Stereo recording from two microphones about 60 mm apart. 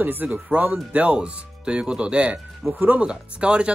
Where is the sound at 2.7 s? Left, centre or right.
Right.